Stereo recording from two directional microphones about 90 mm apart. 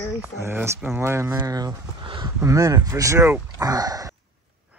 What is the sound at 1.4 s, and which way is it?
Speech, 40° right (ahead or behind).